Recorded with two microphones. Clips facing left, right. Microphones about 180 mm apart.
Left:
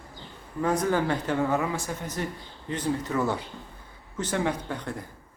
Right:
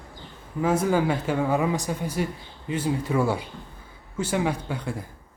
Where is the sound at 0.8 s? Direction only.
10° right (ahead or behind).